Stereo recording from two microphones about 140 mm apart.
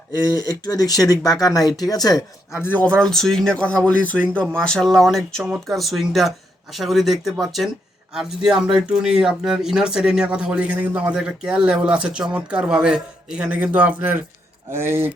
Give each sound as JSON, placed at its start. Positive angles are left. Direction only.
{"t": 0.1, "sound": "speech", "side_deg": 30}
{"t": 2.6, "sound": "speech", "side_deg": 15}